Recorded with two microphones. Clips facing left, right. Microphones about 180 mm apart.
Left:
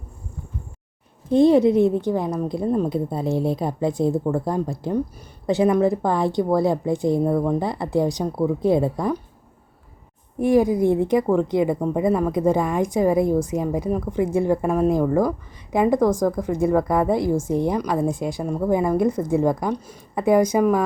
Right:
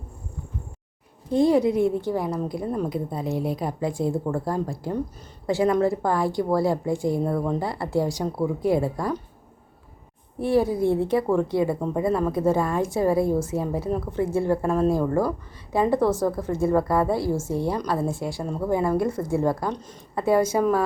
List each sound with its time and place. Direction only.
1.3 s a woman's voice: 25° left (ahead or behind)
10.3 s a woman's voice: 15° left (ahead or behind)